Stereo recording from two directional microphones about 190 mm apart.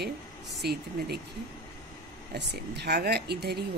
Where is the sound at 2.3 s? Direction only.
60° right (ahead or behind).